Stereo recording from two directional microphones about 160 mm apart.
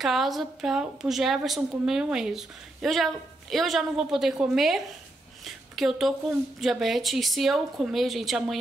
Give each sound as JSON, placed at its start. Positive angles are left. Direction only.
{"t": 0.0, "sound": "a woman's voice", "side_deg": 0}